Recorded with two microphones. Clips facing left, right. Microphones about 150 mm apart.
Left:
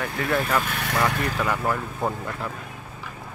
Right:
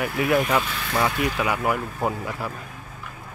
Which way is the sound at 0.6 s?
60° left (ahead or behind).